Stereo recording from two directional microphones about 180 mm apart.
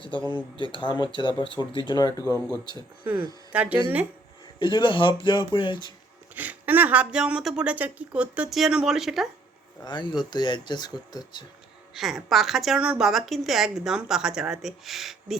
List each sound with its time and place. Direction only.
0.3 s speech: 25° left (ahead or behind)
3.5 s speech: 10° right (ahead or behind)
4.6 s speech: 25° left (ahead or behind)
6.3 s a woman's voice: 10° right (ahead or behind)
9.8 s speech: 25° left (ahead or behind)
11.9 s a woman's voice: centre (ahead or behind)